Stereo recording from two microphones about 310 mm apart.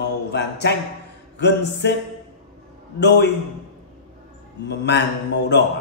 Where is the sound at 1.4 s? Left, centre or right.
Left.